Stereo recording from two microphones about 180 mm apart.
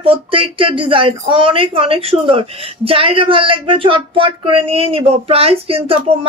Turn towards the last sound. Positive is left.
turn(degrees=-30)  # may be behind; listen again after turning